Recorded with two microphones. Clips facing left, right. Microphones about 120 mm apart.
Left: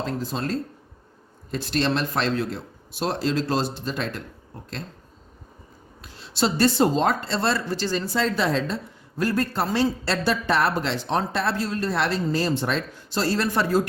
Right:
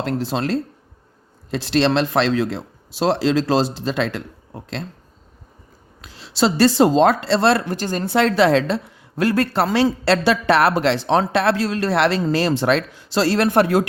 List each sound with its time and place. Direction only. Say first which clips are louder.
0.0 s a man's voice: right 6 dB; 75° right (ahead or behind)
6.0 s speech: right 5 dB; 90° right; by 13.8 s 65° right (ahead or behind)